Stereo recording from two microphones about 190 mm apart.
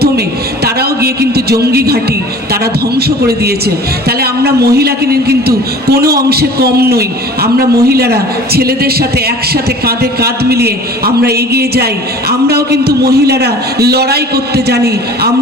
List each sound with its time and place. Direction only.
0.6 s a man's voice: 55° right (ahead or behind)